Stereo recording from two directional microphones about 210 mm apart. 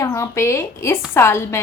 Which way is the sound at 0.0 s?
15° left (ahead or behind).